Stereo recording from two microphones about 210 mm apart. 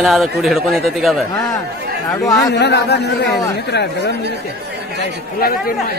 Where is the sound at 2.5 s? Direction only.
55° left (ahead or behind).